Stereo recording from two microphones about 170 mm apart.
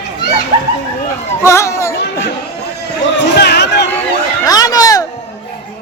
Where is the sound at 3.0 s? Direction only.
85° left.